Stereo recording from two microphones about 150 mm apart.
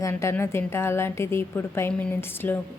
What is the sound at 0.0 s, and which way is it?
A woman's voice, 20° left (ahead or behind).